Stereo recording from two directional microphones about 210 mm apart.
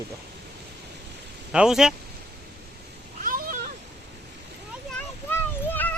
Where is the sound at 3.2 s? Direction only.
40° right (ahead or behind).